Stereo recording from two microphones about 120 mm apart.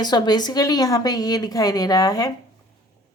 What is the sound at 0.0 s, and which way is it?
A woman's voice, 35° left (ahead or behind).